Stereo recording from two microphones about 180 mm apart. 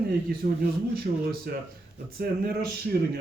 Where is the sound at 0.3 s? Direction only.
55° right (ahead or behind).